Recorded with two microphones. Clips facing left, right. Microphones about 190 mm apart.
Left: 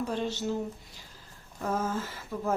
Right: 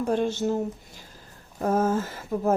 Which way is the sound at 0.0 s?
50° right (ahead or behind).